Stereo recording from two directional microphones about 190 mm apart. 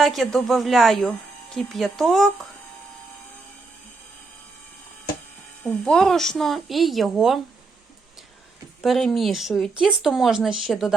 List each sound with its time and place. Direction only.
0.0 s speech: centre (ahead or behind)
5.6 s speech: 5° left (ahead or behind)
8.8 s speech: centre (ahead or behind)